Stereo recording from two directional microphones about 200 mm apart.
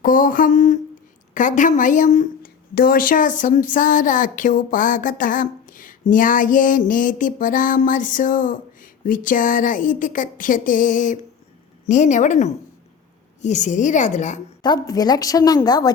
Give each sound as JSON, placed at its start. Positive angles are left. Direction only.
{"t": 0.0, "sound": "a sound", "side_deg": 45}
{"t": 1.3, "sound": "speech", "side_deg": 40}
{"t": 14.6, "sound": "a woman's voice", "side_deg": 20}